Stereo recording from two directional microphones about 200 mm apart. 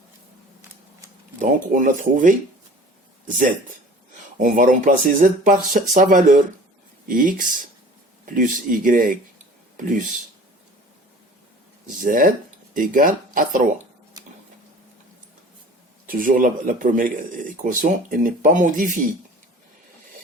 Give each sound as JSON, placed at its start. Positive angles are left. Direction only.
{"t": 1.4, "sound": "speech", "side_deg": -40}
{"t": 12.0, "sound": "speech", "side_deg": -40}
{"t": 16.0, "sound": "speech", "side_deg": -45}